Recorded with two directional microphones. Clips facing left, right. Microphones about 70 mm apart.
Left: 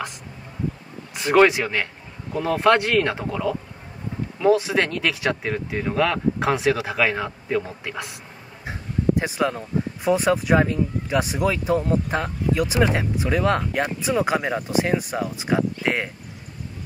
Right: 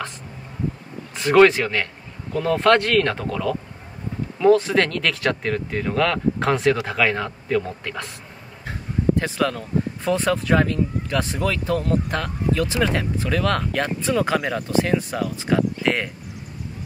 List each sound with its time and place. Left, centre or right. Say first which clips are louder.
1.1 s speech: right 2 dB; centre
4.4 s speech: right 3 dB; centre